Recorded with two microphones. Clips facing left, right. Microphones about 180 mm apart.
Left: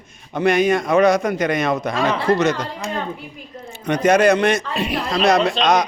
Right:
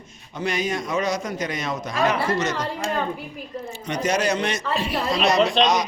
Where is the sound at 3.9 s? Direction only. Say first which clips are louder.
Left 8 dB; 55° left (ahead or behind).